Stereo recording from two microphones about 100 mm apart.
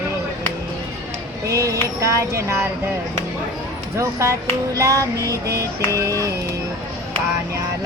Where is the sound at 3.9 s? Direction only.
30° right (ahead or behind).